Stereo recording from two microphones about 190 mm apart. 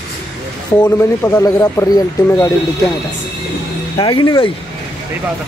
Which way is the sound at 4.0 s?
25° left (ahead or behind).